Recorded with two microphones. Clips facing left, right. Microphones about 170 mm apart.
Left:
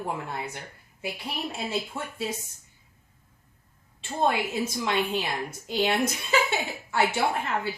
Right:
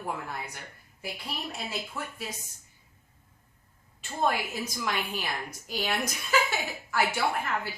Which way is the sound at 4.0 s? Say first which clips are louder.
Left 3 dB; 25° left (ahead or behind).